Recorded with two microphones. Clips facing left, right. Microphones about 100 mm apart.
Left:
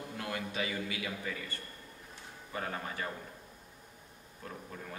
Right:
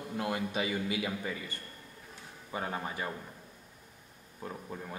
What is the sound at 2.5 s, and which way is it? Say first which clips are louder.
Speech: right 2 dB; 20° right (ahead or behind).